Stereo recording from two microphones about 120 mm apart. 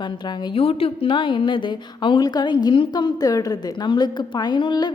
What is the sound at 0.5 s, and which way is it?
A woman's voice, 50° left (ahead or behind).